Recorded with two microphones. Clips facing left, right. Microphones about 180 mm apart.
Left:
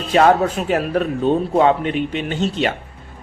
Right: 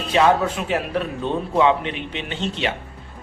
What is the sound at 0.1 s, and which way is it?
Speech, 45° left (ahead or behind).